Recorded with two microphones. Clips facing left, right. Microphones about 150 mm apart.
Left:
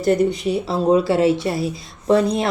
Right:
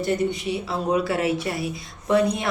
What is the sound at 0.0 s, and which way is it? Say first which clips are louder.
Speech: left 6 dB; 35° left (ahead or behind).